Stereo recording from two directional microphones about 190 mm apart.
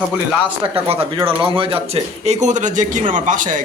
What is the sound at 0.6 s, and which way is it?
Speech, 30° right (ahead or behind).